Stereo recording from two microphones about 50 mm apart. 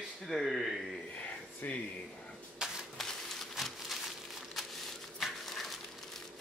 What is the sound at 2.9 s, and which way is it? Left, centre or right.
Crumpling, centre.